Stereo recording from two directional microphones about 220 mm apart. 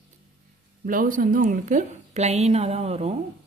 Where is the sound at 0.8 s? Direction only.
40° right (ahead or behind).